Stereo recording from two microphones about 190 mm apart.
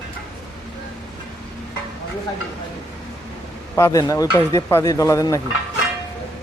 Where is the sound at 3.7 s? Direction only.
15° left (ahead or behind).